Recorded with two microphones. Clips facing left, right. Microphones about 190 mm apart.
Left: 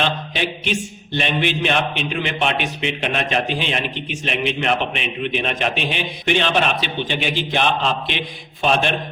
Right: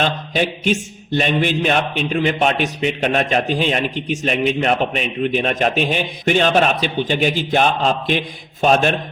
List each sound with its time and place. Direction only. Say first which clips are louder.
0.0 s mantra: right 3 dB; 40° right (ahead or behind)
8.6 s a man's voice: right 4 dB; 45° right (ahead or behind)